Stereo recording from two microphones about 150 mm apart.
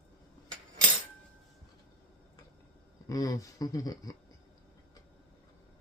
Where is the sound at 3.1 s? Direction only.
20° left (ahead or behind).